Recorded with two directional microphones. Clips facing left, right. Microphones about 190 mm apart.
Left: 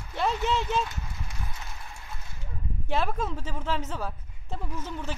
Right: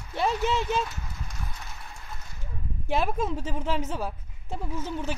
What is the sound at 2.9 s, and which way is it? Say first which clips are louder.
Speech: right 2 dB; 15° right (ahead or behind).